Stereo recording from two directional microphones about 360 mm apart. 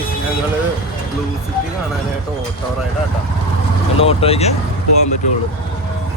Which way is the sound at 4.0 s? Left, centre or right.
Centre.